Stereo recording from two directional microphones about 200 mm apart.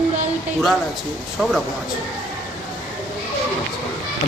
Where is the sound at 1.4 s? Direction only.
Centre (ahead or behind).